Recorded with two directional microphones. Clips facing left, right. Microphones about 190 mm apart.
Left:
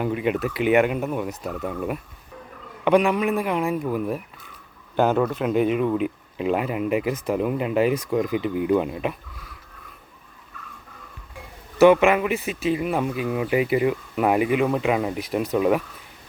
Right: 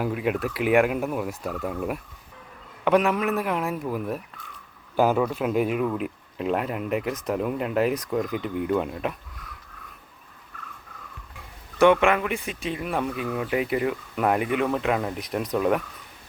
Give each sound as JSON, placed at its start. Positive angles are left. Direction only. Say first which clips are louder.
{"t": 0.0, "sound": "speech", "louder": "left 2 dB", "side_deg": 0}
{"t": 11.8, "sound": "speech", "louder": "left 3 dB", "side_deg": 5}